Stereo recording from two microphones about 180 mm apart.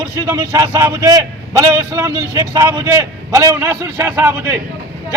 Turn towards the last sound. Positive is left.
turn(degrees=-15)  # may be behind; listen again after turning